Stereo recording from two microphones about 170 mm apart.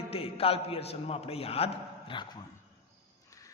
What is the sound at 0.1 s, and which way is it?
A man's voice, 35° left (ahead or behind).